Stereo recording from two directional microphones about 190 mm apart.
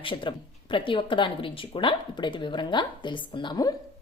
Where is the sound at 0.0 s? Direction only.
25° left (ahead or behind).